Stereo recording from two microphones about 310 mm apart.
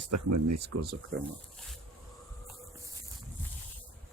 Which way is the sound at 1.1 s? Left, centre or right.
Right.